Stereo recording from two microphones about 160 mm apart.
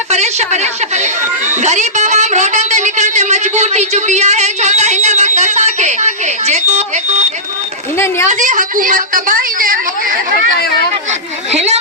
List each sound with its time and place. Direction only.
0.1 s speech: 45° right (ahead or behind)
7.9 s speech: 15° left (ahead or behind)
8.3 s a woman's voice: 55° right (ahead or behind)
11.5 s a woman's voice: 45° right (ahead or behind)